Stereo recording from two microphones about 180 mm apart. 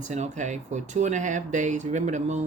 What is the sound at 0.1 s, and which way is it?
Speech, 40° right (ahead or behind).